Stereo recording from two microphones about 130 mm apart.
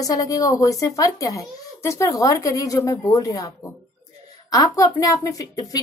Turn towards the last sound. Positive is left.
turn(degrees=25)  # may be behind; listen again after turning